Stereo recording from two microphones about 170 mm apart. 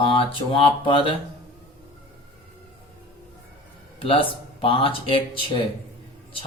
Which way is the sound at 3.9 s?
30° left (ahead or behind).